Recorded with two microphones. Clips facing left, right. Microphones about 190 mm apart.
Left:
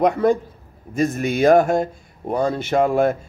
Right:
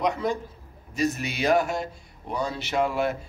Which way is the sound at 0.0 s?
55° left (ahead or behind).